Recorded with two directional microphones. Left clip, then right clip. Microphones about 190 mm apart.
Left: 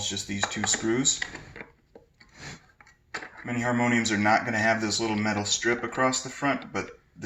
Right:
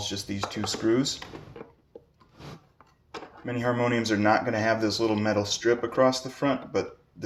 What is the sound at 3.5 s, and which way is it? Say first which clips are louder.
Speech: even; 45° right (ahead or behind).